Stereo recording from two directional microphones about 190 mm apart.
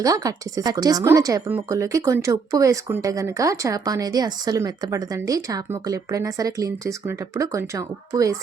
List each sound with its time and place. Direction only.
0.0 s speech: 20° right (ahead or behind)